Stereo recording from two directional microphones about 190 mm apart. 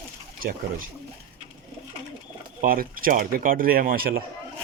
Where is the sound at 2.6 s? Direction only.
50° right (ahead or behind).